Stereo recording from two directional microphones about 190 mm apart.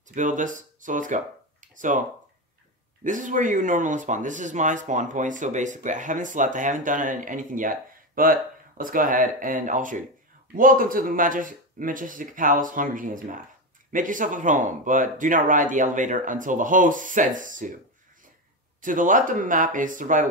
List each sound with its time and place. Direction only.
0.1 s speech: 40° right (ahead or behind)
3.0 s speech: 40° right (ahead or behind)
18.8 s speech: 45° right (ahead or behind)